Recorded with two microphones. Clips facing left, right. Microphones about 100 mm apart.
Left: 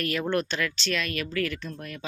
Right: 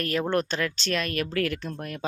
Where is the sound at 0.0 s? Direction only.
35° right (ahead or behind).